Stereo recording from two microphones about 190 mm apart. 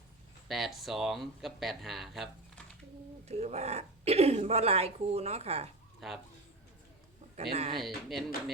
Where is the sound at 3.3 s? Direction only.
35° right (ahead or behind).